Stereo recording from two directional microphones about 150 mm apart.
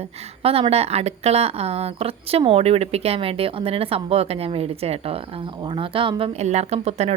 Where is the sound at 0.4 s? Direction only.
40° right (ahead or behind).